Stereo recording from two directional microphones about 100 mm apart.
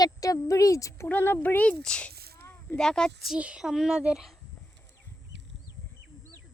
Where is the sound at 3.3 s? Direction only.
10° right (ahead or behind).